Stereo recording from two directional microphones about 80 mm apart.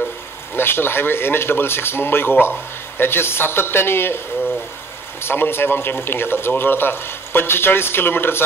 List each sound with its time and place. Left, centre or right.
0.6 s speech: left
5.2 s speech: left